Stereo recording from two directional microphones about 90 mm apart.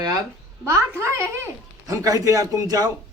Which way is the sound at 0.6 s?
30° right (ahead or behind).